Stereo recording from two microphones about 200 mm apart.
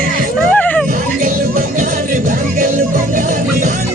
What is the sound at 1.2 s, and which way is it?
Music, 40° right (ahead or behind).